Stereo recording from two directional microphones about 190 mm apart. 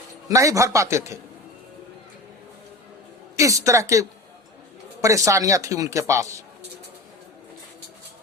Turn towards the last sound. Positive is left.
turn(degrees=-15)  # may be behind; listen again after turning